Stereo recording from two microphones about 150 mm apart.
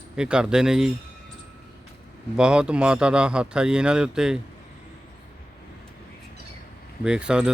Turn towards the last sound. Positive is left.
turn(degrees=-5)  # may be behind; listen again after turning